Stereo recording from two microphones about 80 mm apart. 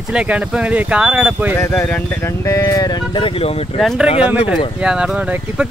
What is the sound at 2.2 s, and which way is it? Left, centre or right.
Speech, left.